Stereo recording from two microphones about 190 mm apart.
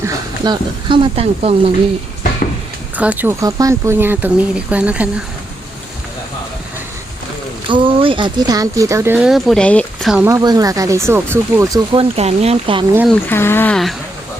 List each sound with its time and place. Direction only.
0.0 s speech: 20° right (ahead or behind)
2.9 s speech: 10° right (ahead or behind)
7.7 s speech: 25° right (ahead or behind); by 10.2 s centre (ahead or behind)
10.2 s speech: 20° right (ahead or behind)
11.9 s speech: 30° right (ahead or behind)
13.1 s speech: 10° left (ahead or behind)